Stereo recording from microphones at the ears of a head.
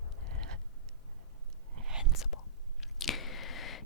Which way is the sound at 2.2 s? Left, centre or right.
Left.